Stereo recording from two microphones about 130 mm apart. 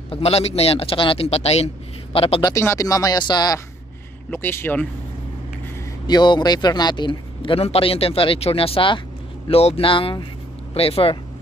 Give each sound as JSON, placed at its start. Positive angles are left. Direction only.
{"t": 0.1, "sound": "speech", "side_deg": 50}
{"t": 2.4, "sound": "speech", "side_deg": 20}
{"t": 4.3, "sound": "speech", "side_deg": 20}
{"t": 6.0, "sound": "speech", "side_deg": 35}